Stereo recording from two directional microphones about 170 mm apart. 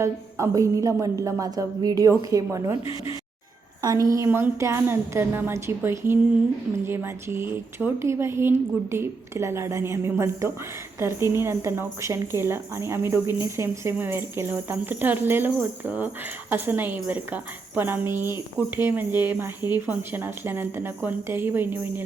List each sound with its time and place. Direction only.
0.0 s a woman's voice: 15° right (ahead or behind)
3.8 s a woman's voice: 20° right (ahead or behind)